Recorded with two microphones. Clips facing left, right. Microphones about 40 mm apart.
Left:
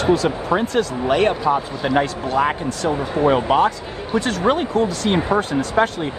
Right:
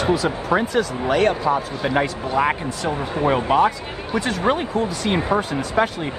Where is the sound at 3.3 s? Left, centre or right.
Left.